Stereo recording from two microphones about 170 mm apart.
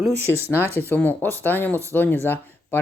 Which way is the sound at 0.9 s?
10° left (ahead or behind).